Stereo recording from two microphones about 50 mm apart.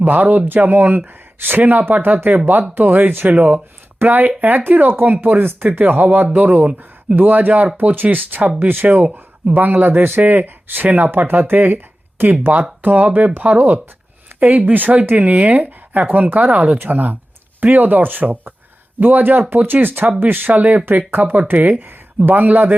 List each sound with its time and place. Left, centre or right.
0.0 s speech: right
16.7 s speech: right